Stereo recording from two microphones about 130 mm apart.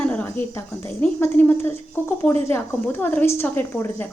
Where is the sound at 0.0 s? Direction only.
15° left (ahead or behind).